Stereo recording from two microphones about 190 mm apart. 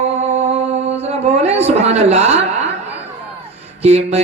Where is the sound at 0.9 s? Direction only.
35° right (ahead or behind).